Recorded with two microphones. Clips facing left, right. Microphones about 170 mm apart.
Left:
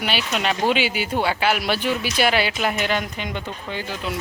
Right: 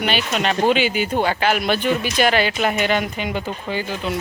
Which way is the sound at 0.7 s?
50° right (ahead or behind).